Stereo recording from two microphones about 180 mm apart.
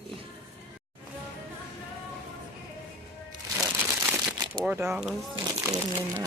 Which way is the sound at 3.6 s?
10° right (ahead or behind).